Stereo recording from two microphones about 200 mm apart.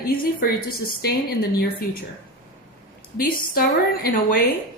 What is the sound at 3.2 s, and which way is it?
A woman's voice, 50° left (ahead or behind).